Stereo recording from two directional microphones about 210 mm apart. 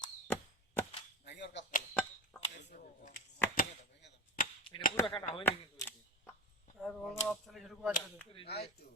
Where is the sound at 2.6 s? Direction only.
35° left (ahead or behind).